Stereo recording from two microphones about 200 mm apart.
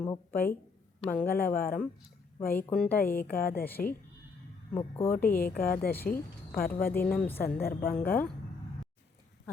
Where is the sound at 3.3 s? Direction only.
50° left (ahead or behind).